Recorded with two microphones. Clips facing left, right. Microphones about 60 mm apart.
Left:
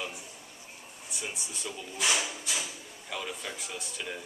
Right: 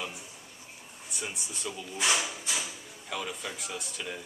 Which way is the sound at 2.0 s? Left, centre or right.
Right.